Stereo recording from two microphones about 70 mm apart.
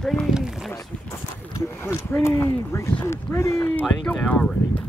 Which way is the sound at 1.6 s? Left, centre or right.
Left.